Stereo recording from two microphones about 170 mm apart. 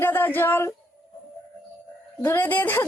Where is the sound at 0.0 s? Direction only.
10° left (ahead or behind).